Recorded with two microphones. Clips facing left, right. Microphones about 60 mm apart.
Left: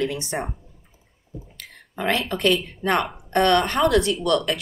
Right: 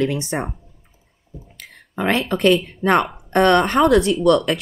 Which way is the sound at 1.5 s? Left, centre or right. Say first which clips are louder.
Right 8 dB; right.